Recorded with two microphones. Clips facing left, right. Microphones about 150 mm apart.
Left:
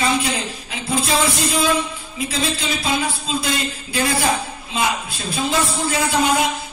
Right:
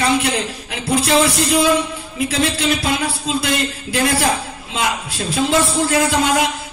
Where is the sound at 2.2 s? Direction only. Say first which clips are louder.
Right 4 dB; 70° right (ahead or behind).